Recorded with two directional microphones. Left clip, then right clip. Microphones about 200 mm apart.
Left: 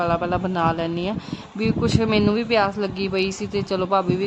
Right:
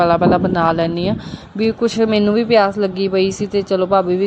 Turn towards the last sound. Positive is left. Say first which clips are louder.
# right 6 dB
turn(degrees=-10)  # may be behind; listen again after turning